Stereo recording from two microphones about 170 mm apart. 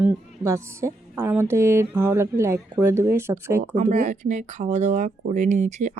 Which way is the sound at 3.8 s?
45° right (ahead or behind).